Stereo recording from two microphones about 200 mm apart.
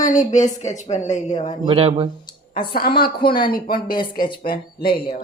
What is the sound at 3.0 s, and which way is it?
Speech, 50° left (ahead or behind).